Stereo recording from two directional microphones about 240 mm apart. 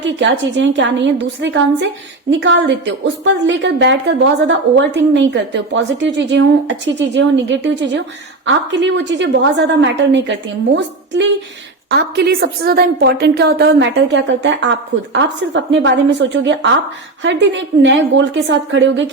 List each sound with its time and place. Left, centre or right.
0.0 s a woman's voice: right